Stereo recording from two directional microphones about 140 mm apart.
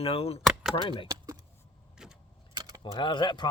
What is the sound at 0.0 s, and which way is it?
Speech, 45° left (ahead or behind).